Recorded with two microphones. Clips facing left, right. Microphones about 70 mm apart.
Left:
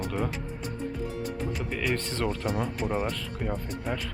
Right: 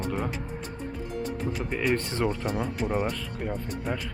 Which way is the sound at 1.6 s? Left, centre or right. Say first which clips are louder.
Right 4 dB; centre.